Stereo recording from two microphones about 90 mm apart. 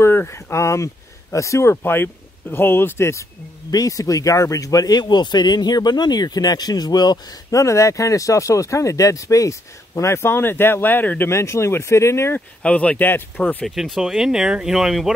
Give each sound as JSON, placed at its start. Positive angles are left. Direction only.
{"t": 0.0, "sound": "speech", "side_deg": 30}
{"t": 3.7, "sound": "speech", "side_deg": 40}
{"t": 7.6, "sound": "speech", "side_deg": 35}
{"t": 12.4, "sound": "speech", "side_deg": 15}
{"t": 13.7, "sound": "speech", "side_deg": 0}